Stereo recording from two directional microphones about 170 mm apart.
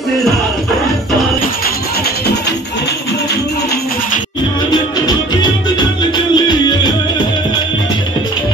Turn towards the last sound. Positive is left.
turn(degrees=25)  # may be behind; listen again after turning